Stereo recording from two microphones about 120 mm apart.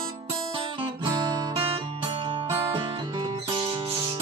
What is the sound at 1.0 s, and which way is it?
Guitar, 35° right (ahead or behind).